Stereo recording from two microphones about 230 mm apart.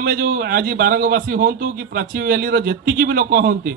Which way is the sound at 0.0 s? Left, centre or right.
Right.